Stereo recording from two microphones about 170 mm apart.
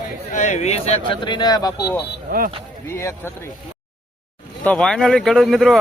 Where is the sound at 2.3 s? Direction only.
60° right (ahead or behind).